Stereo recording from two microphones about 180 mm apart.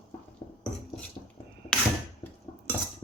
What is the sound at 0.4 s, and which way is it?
Dishes, 25° left (ahead or behind).